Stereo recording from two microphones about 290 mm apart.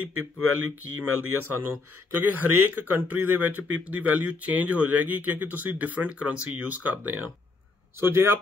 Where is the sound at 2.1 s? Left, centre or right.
Right.